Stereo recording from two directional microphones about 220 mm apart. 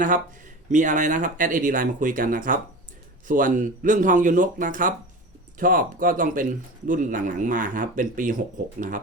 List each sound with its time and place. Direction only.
0.7 s speech: 35° right (ahead or behind)